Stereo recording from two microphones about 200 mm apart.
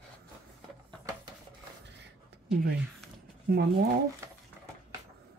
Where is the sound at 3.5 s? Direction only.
50° right (ahead or behind).